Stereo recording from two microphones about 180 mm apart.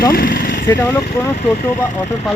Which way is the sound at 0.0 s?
55° left (ahead or behind).